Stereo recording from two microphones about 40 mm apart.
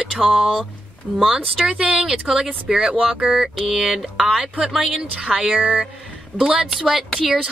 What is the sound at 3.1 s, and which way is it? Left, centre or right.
Speech, right.